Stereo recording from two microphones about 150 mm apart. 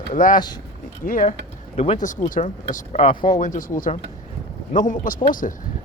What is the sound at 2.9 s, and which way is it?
Speech, 40° left (ahead or behind).